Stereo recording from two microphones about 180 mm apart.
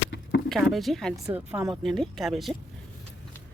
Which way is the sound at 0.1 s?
70° left (ahead or behind).